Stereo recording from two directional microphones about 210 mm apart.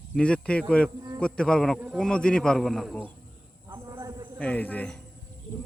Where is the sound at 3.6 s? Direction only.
15° right (ahead or behind).